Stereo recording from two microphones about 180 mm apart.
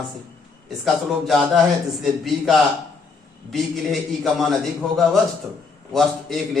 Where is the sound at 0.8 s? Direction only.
Centre (ahead or behind).